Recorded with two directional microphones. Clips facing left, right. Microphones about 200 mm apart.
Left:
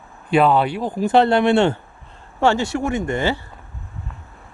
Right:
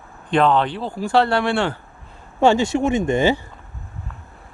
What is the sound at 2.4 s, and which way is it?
Speech, 15° right (ahead or behind).